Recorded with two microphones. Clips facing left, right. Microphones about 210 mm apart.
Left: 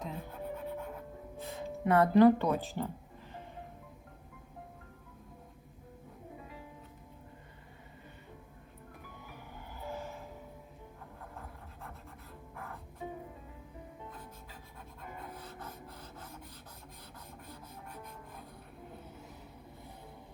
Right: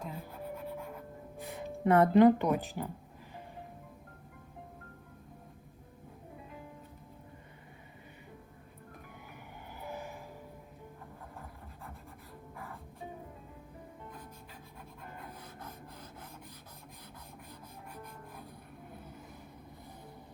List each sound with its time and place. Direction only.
0.0 s music: 10° right (ahead or behind)
1.8 s speech: 25° right (ahead or behind)
9.8 s vehicle: 15° right (ahead or behind)
15.4 s rub: 10° right (ahead or behind)